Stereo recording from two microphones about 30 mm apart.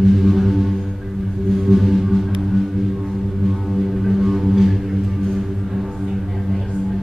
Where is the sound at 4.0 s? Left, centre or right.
Centre.